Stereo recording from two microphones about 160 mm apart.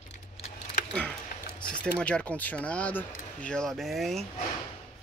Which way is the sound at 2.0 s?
10° left (ahead or behind).